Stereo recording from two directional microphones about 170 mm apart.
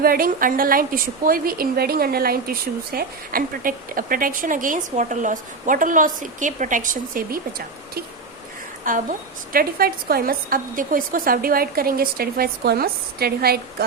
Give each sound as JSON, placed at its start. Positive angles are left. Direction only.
{"t": 0.0, "sound": "a woman's voice", "side_deg": -60}
{"t": 8.9, "sound": "a woman's voice", "side_deg": -50}